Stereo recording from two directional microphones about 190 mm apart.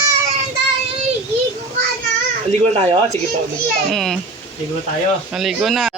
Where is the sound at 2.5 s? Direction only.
35° right (ahead or behind).